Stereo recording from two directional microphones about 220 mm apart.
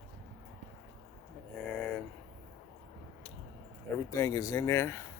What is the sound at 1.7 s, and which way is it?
Speech, 5° left (ahead or behind).